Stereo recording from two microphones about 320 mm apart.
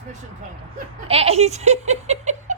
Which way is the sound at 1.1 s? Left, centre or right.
Centre.